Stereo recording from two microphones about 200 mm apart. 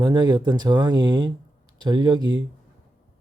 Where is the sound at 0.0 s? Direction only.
20° right (ahead or behind).